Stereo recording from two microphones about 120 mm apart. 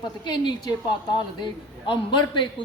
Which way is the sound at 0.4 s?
35° left (ahead or behind).